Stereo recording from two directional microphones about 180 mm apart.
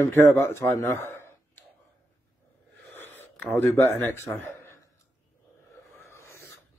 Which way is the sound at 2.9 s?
10° left (ahead or behind).